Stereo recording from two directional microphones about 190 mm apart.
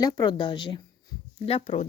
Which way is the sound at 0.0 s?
25° left (ahead or behind).